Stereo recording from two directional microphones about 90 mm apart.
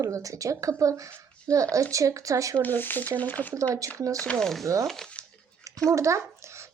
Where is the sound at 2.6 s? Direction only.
20° left (ahead or behind).